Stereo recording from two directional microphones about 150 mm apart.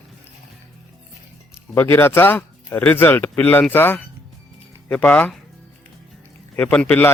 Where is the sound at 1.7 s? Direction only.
15° left (ahead or behind).